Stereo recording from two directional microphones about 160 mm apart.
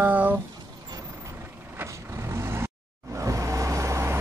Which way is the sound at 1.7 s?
15° right (ahead or behind).